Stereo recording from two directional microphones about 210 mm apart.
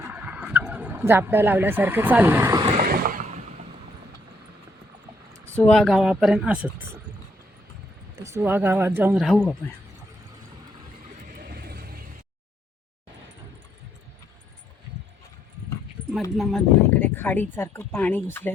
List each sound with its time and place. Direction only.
0.1 s speech: 5° right (ahead or behind)
2.7 s a sound: 45° right (ahead or behind)
5.5 s speech: 5° left (ahead or behind)
8.2 s speech: 10° right (ahead or behind)
9.1 s speech: centre (ahead or behind)
11.3 s vehicle: 45° right (ahead or behind)
16.4 s speech: centre (ahead or behind)